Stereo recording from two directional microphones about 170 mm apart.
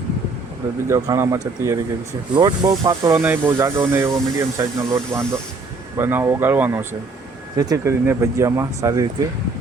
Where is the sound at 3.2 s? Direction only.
10° right (ahead or behind).